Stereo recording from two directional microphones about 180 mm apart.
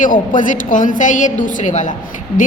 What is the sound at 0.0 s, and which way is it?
A woman's voice, 45° left (ahead or behind).